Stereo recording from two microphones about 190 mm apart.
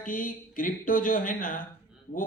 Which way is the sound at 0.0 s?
45° left (ahead or behind).